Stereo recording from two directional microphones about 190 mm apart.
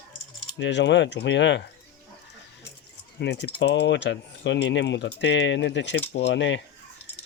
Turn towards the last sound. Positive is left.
turn(degrees=70)  # may be behind; listen again after turning